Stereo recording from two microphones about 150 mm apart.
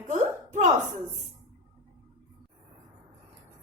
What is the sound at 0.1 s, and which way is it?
Hiccup, 55° right (ahead or behind).